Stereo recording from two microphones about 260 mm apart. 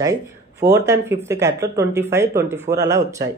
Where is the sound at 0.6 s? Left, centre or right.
Centre.